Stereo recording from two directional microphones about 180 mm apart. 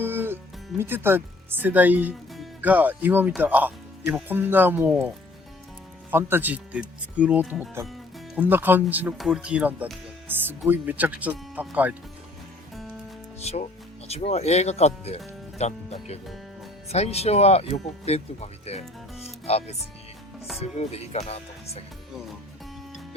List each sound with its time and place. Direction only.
0.0 s music: 10° right (ahead or behind)
0.8 s speech: 10° right (ahead or behind)
13.4 s speech: 35° left (ahead or behind)